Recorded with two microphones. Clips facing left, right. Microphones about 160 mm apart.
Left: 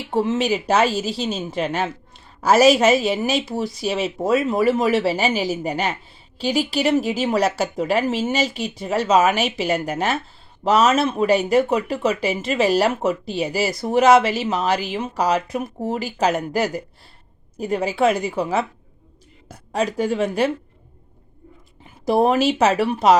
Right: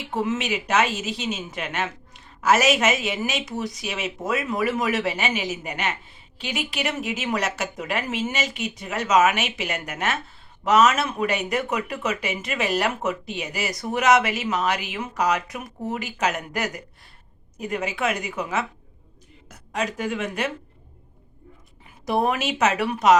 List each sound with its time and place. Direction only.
0.1 s speech: 30° left (ahead or behind)
22.0 s speech: 30° left (ahead or behind)